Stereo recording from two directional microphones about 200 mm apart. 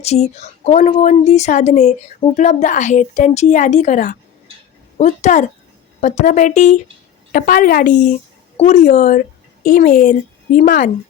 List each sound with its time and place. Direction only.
0.0 s a woman's voice: 35° left (ahead or behind)